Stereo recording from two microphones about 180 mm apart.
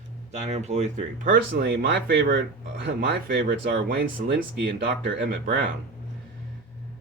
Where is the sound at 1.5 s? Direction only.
80° right.